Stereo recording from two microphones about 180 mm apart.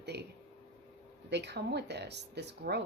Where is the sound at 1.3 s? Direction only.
70° right (ahead or behind).